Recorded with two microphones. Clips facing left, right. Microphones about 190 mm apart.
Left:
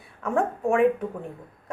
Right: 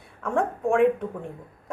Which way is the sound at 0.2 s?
5° left (ahead or behind).